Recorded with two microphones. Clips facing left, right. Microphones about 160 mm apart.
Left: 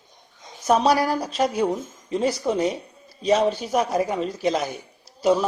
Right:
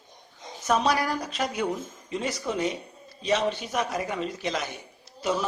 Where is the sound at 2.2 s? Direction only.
40° left (ahead or behind).